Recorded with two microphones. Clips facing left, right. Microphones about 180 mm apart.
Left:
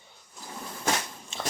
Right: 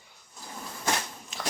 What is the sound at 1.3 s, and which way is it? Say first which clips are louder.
Biting: left 2 dB; 25° left (ahead or behind).